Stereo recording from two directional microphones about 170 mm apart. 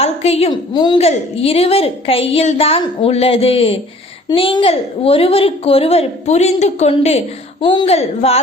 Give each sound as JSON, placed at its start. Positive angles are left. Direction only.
{"t": 0.0, "sound": "a woman's voice", "side_deg": 40}